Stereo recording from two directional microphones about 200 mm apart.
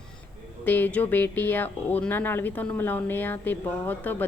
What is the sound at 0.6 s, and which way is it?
Speech, 10° left (ahead or behind).